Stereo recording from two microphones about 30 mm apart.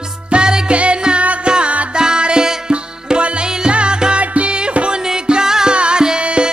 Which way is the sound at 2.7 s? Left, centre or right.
Right.